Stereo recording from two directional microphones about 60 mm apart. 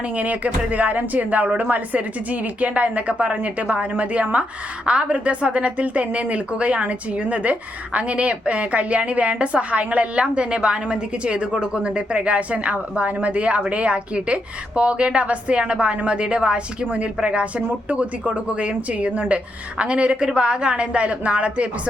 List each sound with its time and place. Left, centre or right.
0.2 s a woman's voice: right